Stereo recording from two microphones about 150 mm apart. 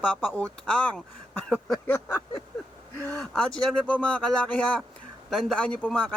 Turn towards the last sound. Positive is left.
turn(degrees=5)  # may be behind; listen again after turning